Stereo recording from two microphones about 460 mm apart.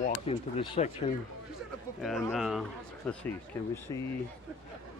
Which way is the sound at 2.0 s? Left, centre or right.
Centre.